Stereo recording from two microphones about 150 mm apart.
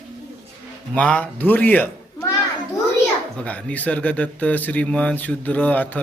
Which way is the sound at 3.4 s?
10° left (ahead or behind).